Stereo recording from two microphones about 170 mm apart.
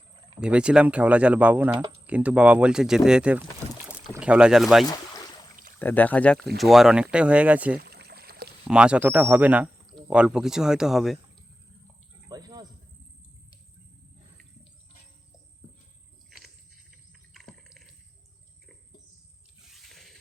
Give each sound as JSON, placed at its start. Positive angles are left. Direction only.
{"t": 0.3, "sound": "speech", "side_deg": -5}
{"t": 5.8, "sound": "speech", "side_deg": 10}
{"t": 7.8, "sound": "pour", "side_deg": -70}
{"t": 8.6, "sound": "speech", "side_deg": -5}
{"t": 12.3, "sound": "cricket", "side_deg": -25}
{"t": 17.1, "sound": "a sound", "side_deg": 0}
{"t": 19.7, "sound": "a sound", "side_deg": 0}